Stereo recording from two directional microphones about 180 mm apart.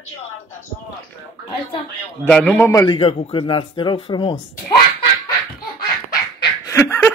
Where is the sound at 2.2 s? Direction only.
5° left (ahead or behind).